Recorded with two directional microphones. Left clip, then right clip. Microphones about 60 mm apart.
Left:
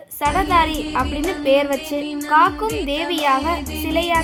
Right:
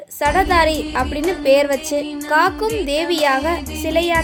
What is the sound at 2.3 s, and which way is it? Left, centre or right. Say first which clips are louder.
Music: left 1 dB; right.